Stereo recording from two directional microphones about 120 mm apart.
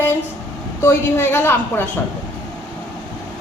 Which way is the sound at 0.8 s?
20° left (ahead or behind).